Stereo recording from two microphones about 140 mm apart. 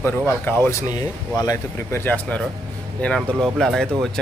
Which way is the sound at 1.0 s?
25° left (ahead or behind).